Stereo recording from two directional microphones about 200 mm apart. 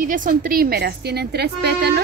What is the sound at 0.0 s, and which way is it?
A woman's voice, 40° right (ahead or behind).